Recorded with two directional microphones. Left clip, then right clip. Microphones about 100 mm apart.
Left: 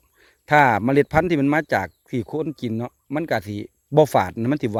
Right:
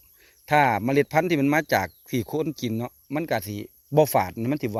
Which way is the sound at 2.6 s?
15° left (ahead or behind).